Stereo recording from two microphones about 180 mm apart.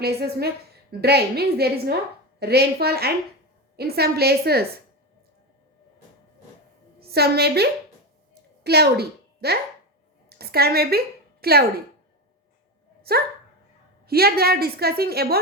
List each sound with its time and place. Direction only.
0.0 s a woman's voice: 60° right (ahead or behind)
7.0 s a woman's voice: 60° right (ahead or behind)
10.2 s a sound: 60° right (ahead or behind)
13.0 s dog: 60° right (ahead or behind)
14.1 s a woman's voice: 60° right (ahead or behind)